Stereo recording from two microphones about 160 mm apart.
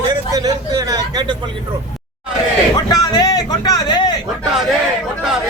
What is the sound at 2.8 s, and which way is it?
Speech, 25° left (ahead or behind).